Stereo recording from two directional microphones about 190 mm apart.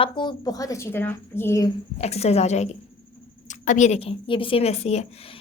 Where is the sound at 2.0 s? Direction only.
35° left (ahead or behind).